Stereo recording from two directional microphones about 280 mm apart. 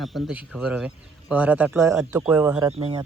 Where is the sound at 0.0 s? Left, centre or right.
Centre.